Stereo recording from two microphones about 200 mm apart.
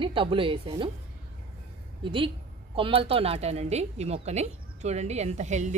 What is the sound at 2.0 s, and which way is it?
A woman's voice, 25° right (ahead or behind).